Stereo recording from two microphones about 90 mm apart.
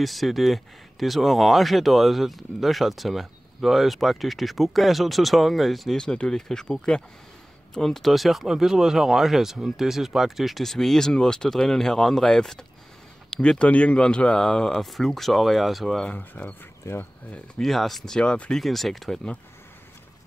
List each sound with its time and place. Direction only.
0.0 s speech: centre (ahead or behind)
16.1 s speech: 15° left (ahead or behind)
16.8 s speech: 30° left (ahead or behind)
17.6 s speech: centre (ahead or behind)